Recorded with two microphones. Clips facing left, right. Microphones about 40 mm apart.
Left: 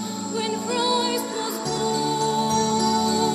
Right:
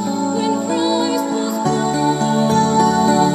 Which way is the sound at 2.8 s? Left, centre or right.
Right.